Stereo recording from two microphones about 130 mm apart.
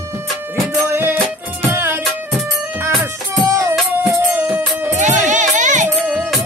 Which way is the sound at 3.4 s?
25° right (ahead or behind).